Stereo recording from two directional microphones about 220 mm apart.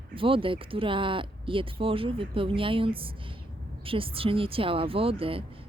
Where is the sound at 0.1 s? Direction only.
25° right (ahead or behind).